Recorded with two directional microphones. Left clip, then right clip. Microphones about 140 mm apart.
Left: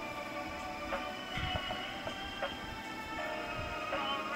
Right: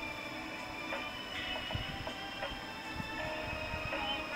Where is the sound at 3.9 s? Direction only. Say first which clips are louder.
Left 2 dB; 40° left (ahead or behind).